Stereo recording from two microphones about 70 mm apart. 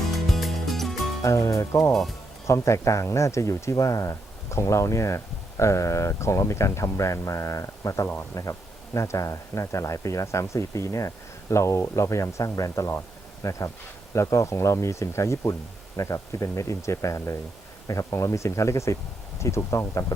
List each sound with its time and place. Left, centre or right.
0.3 s music: centre
1.2 s speech: left
8.0 s speech: left
8.4 s speech: left